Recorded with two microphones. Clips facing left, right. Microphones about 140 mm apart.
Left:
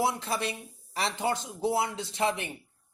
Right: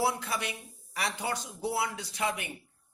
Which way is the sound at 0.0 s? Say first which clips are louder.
Left 2 dB; 25° left (ahead or behind).